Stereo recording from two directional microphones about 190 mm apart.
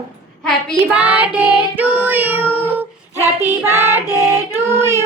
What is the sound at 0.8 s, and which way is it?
Child singing, 5° right (ahead or behind).